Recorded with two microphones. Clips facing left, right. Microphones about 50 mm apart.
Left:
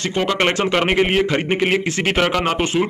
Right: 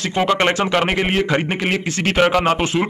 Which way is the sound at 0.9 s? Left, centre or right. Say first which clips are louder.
Left 1 dB; centre.